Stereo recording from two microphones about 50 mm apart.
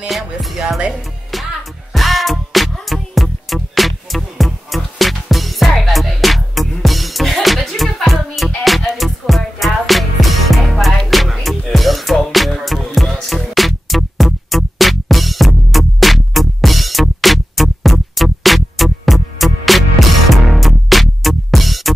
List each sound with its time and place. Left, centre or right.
0.1 s music: centre
0.7 s speech: centre
1.3 s music: centre